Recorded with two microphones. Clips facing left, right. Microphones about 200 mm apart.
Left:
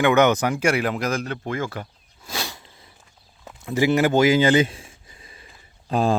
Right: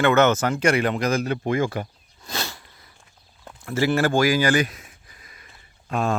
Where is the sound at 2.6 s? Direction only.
20° left (ahead or behind).